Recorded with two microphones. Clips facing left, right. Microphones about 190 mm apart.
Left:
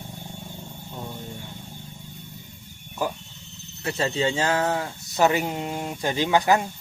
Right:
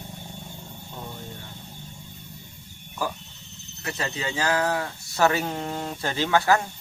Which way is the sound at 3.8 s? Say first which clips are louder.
Left 6 dB; 30° left (ahead or behind).